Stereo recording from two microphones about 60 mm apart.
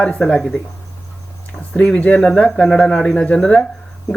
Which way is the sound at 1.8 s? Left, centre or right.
Centre.